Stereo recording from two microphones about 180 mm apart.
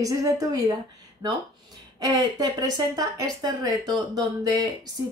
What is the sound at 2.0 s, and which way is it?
Speech, 20° right (ahead or behind).